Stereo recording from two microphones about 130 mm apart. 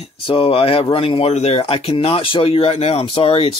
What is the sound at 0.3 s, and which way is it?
Speech, 45° left (ahead or behind).